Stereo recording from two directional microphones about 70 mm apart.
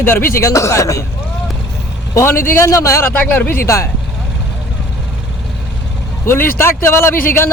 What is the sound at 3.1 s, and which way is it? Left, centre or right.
Speech, left.